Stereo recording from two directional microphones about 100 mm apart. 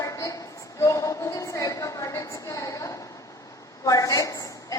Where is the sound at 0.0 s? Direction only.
35° left (ahead or behind).